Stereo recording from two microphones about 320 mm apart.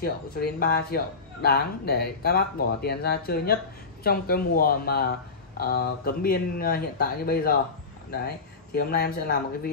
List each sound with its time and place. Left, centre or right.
0.0 s speech: left